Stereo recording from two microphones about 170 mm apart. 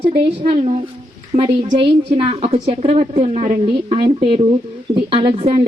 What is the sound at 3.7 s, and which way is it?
A woman's voice, 30° right (ahead or behind).